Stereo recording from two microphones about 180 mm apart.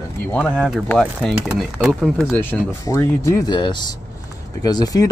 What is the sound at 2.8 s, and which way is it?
Speech, 20° left (ahead or behind).